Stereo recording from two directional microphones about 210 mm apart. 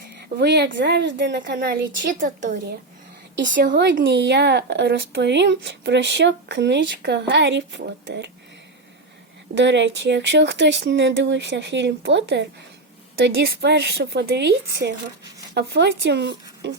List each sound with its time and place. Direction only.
0.3 s speech: 55° right (ahead or behind)
1.5 s speech: 45° right (ahead or behind)
9.6 s speech: 55° right (ahead or behind)